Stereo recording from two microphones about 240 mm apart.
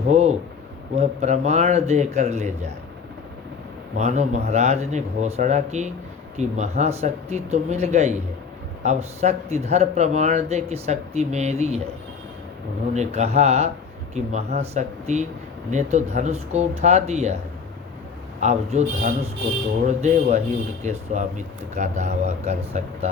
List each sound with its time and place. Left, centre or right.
0.1 s speech: right
3.9 s speech: right
12.9 s speech: right
18.3 s speech: right